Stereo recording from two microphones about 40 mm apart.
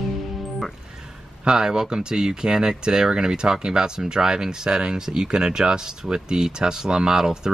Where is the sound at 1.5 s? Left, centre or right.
Centre.